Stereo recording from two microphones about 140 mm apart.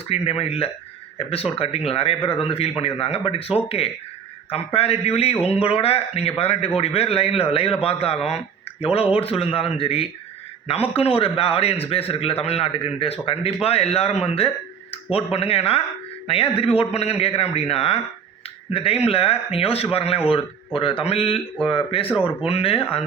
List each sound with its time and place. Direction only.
0.1 s a man's voice: 45° left (ahead or behind)